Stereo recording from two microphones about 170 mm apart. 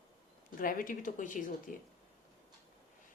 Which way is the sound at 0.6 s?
55° left (ahead or behind).